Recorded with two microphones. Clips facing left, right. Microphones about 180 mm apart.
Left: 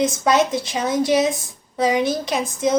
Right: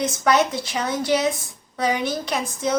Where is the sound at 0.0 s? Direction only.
25° left (ahead or behind).